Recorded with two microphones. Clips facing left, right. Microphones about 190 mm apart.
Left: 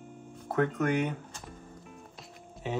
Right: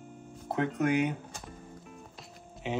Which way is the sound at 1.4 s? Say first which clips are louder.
Even; centre (ahead or behind).